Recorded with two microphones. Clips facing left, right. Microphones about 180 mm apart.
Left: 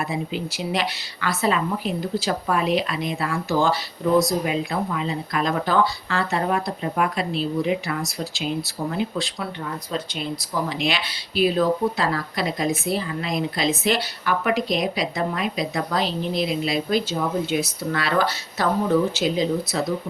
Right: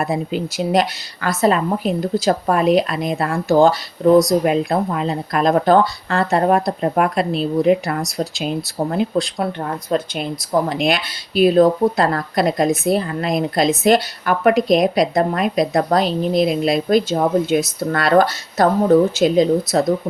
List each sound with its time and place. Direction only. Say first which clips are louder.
0.0 s speech: right 6 dB; 45° right (ahead or behind)
9.1 s speech: right 8 dB; 55° right (ahead or behind)